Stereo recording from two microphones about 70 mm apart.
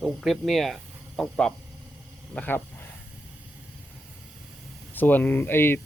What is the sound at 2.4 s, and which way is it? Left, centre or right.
Speech, centre.